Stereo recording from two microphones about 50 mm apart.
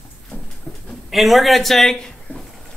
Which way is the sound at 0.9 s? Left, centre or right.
Centre.